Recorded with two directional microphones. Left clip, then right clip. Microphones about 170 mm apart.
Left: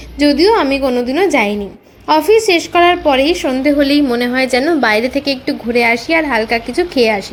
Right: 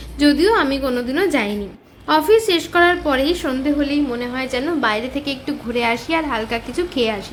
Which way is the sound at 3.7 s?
40° left (ahead or behind).